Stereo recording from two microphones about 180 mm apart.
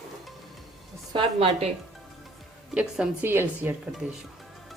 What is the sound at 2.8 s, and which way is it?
A woman's voice, 5° right (ahead or behind).